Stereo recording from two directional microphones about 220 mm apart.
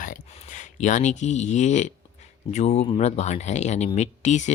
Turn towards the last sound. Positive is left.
turn(degrees=30)  # may be behind; listen again after turning